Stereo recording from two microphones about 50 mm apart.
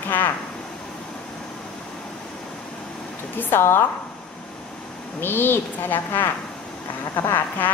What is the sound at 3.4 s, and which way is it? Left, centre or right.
Speech, left.